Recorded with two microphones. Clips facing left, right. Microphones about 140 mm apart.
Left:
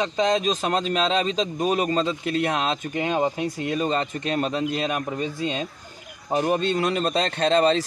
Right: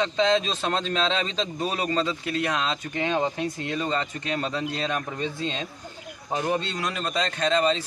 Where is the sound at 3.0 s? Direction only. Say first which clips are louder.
Left 1 dB; 15° left (ahead or behind).